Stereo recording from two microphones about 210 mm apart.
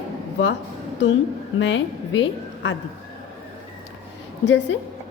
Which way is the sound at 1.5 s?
60° left (ahead or behind).